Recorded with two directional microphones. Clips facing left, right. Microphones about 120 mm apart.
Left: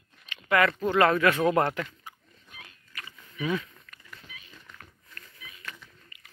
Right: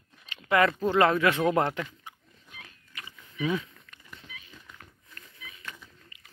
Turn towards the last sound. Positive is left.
turn(degrees=-15)  # may be behind; listen again after turning